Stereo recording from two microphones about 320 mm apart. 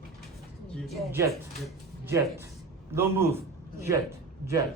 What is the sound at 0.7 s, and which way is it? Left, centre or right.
Speech, centre.